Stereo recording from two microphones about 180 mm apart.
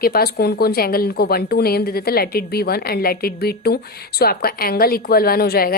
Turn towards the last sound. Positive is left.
turn(degrees=55)  # may be behind; listen again after turning